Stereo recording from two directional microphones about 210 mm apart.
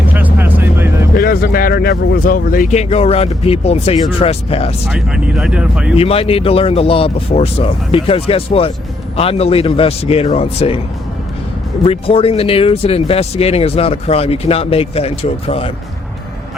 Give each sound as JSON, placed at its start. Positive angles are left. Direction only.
{"t": 0.1, "sound": "vehicle", "side_deg": -10}
{"t": 1.1, "sound": "speech", "side_deg": 45}
{"t": 4.9, "sound": "speech", "side_deg": -5}
{"t": 6.0, "sound": "speech", "side_deg": 30}
{"t": 11.9, "sound": "speech", "side_deg": 25}